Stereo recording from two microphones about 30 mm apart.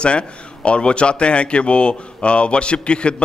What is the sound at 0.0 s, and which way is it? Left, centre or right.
Speech, left.